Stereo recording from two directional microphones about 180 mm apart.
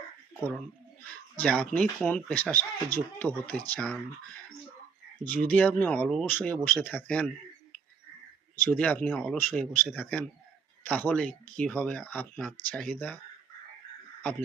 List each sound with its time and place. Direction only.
1.4 s speech: 5° left (ahead or behind)
5.3 s speech: 10° left (ahead or behind)
8.7 s speech: 5° left (ahead or behind)